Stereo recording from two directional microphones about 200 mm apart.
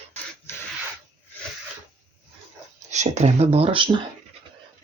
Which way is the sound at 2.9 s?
35° right (ahead or behind).